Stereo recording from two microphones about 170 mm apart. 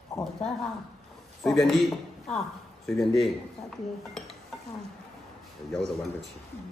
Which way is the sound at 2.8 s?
Centre (ahead or behind).